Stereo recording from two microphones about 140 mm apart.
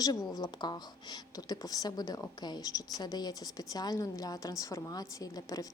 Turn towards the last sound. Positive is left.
turn(degrees=25)  # may be behind; listen again after turning